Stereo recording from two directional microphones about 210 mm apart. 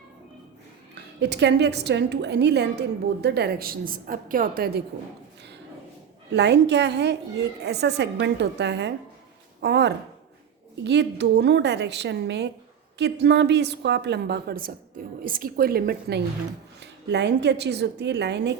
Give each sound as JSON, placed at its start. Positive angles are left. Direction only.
{"t": 1.2, "sound": "a woman's voice", "side_deg": -55}
{"t": 6.3, "sound": "a woman's voice", "side_deg": -55}